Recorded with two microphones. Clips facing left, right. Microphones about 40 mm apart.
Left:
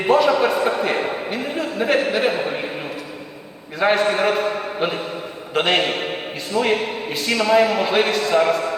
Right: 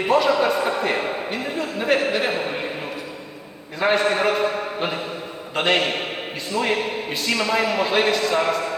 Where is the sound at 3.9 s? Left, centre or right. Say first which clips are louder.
Left 1 dB; centre.